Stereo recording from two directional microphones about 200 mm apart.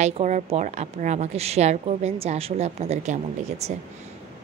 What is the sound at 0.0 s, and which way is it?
A woman's voice, 35° right (ahead or behind).